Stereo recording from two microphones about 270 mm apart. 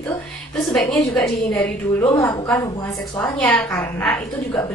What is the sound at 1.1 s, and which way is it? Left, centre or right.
Speech, centre.